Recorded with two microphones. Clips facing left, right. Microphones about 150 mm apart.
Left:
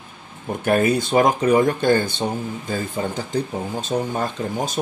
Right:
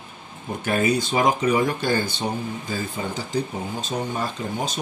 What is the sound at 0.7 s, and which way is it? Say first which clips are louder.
Speech: left 4 dB; 55° left (ahead or behind).